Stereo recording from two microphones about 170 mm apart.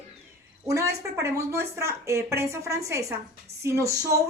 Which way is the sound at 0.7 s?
20° right (ahead or behind).